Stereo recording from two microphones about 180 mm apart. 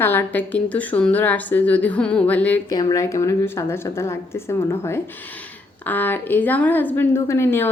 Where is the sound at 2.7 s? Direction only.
20° left (ahead or behind).